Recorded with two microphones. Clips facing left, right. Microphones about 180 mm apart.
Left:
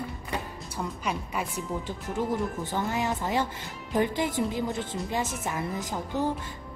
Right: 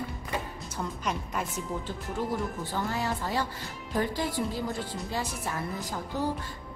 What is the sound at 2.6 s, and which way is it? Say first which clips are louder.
A woman's voice: left 2 dB; 20° left (ahead or behind).